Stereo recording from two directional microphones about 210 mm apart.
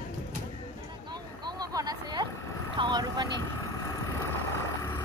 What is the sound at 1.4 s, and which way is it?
Vehicle, 20° right (ahead or behind).